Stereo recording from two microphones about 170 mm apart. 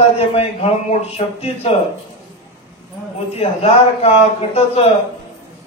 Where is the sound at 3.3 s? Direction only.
35° left (ahead or behind).